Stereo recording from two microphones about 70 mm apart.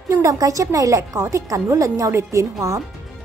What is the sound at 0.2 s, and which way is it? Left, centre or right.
A woman's voice, right.